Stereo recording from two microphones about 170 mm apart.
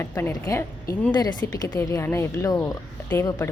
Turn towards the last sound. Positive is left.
turn(degrees=15)  # may be behind; listen again after turning